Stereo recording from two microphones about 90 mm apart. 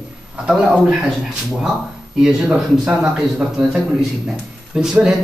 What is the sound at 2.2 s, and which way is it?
Speech, 10° right (ahead or behind).